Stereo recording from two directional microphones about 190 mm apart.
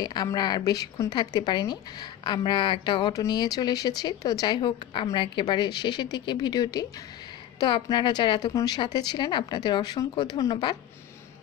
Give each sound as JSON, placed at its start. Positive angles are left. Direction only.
{"t": 0.0, "sound": "speech", "side_deg": 20}